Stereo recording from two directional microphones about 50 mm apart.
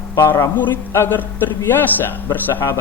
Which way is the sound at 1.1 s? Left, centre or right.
Left.